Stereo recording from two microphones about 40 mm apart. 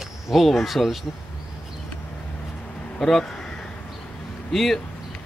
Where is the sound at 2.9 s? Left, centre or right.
Centre.